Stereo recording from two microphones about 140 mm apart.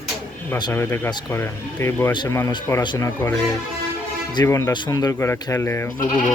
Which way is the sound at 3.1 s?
15° left (ahead or behind).